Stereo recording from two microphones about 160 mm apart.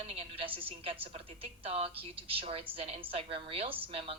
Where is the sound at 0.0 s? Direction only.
40° right (ahead or behind).